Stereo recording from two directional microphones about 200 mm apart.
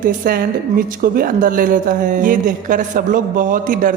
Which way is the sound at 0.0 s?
45° right (ahead or behind).